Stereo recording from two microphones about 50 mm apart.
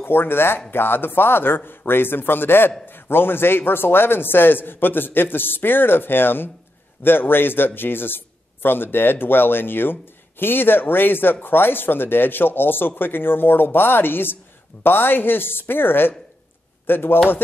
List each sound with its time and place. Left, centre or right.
0.0 s speech: left